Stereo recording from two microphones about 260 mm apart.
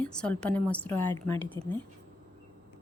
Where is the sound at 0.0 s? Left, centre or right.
Centre.